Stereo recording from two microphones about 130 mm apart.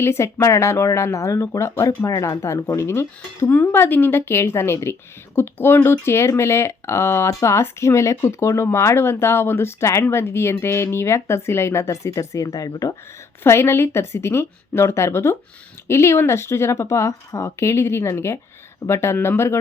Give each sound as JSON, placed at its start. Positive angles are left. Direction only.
{"t": 0.0, "sound": "speech", "side_deg": 20}